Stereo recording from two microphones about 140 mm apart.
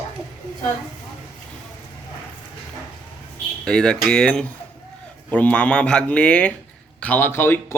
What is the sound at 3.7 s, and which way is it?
Speech, 5° left (ahead or behind).